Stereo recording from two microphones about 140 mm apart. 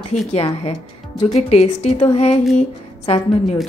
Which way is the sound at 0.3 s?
45° left (ahead or behind).